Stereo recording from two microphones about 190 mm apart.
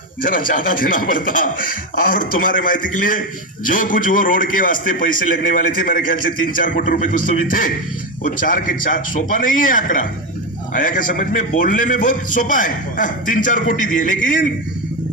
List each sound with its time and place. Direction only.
0.2 s speech: 45° left (ahead or behind)